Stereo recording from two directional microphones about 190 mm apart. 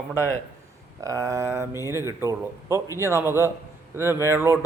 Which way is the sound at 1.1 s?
15° right (ahead or behind).